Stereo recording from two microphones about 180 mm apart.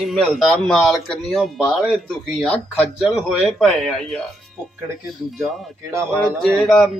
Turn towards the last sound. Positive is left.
turn(degrees=0)  # may be behind; listen again after turning